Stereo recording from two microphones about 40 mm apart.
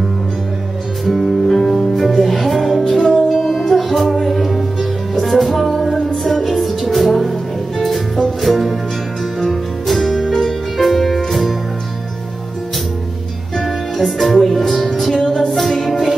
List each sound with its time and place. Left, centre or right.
1.0 s music: centre
13.6 s music: centre